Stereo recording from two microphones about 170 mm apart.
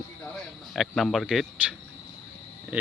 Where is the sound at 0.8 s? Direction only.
Centre (ahead or behind).